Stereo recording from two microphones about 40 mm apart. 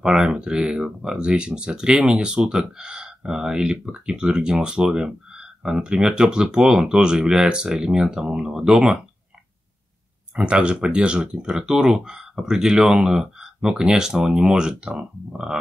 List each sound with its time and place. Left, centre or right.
0.0 s speech: centre
10.3 s speech: right